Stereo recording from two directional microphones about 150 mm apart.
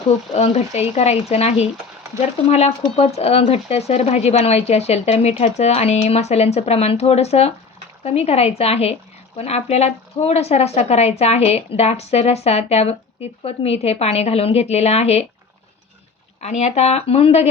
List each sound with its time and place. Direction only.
0.3 s speech: 45° left (ahead or behind)
16.4 s speech: 50° left (ahead or behind)